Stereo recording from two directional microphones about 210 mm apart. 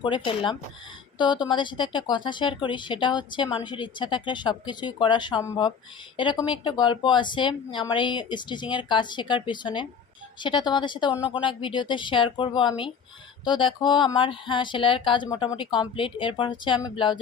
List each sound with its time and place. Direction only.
0.0 s speech: 20° left (ahead or behind)